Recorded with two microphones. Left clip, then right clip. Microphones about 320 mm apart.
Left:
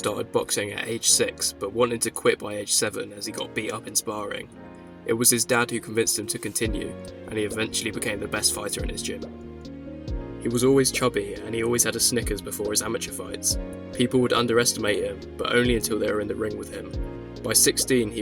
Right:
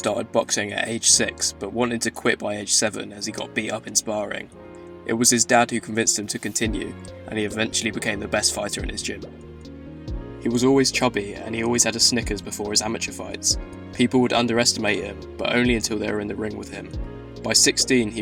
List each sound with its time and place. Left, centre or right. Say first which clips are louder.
0.0 s speech: right 3 dB; left
10.4 s speech: right 2 dB; left
13.9 s speech: right 2 dB; left